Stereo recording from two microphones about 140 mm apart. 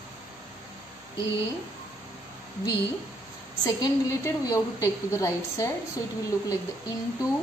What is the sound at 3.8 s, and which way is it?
A woman's voice, 25° left (ahead or behind).